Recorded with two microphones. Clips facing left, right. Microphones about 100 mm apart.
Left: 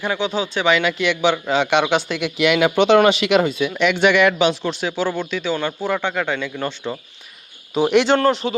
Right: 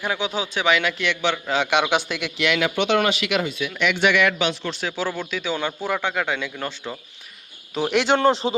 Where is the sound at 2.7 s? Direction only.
30° left (ahead or behind).